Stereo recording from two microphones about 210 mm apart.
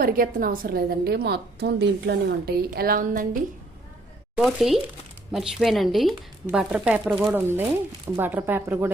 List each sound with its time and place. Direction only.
0.0 s a woman's voice: 40° right (ahead or behind)
4.4 s speech: centre (ahead or behind)